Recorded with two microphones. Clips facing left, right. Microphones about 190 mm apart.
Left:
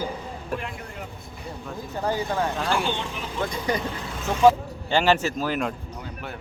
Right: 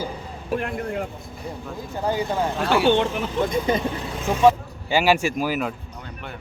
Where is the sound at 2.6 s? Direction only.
65° right (ahead or behind).